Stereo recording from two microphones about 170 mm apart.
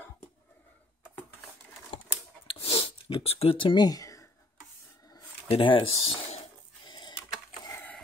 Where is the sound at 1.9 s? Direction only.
35° left (ahead or behind).